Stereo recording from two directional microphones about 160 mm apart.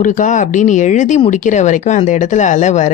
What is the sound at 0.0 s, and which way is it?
Speech, 50° left (ahead or behind).